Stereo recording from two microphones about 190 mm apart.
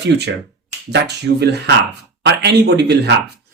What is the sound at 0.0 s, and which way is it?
Speech, 65° right (ahead or behind).